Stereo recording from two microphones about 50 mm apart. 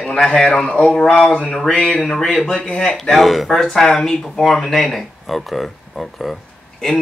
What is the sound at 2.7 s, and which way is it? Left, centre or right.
Speech, left.